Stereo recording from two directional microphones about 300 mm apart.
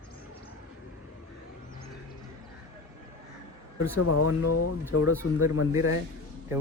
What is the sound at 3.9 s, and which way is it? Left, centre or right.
Speech, left.